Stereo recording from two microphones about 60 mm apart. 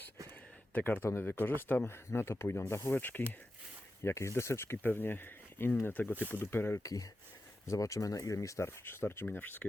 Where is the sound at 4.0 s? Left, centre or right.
Left.